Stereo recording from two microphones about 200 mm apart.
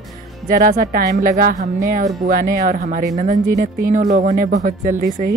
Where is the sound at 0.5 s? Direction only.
45° right (ahead or behind).